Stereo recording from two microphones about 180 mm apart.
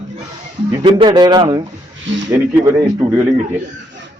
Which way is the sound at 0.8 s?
25° right (ahead or behind).